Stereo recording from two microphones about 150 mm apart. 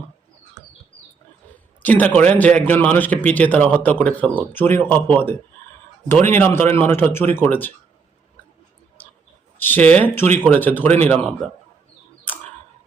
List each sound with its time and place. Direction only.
1.8 s a man's voice: 10° left (ahead or behind)
9.6 s a man's voice: 10° left (ahead or behind)
10.9 s speech: 45° right (ahead or behind)
12.3 s clicking: 10° left (ahead or behind)